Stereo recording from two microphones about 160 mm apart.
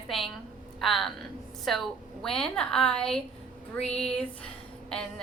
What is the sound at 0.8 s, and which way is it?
Speech, centre (ahead or behind).